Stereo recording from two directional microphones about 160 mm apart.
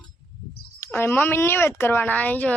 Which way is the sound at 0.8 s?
15° left (ahead or behind).